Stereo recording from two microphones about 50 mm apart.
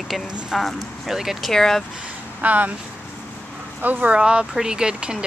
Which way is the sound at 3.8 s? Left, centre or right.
Right.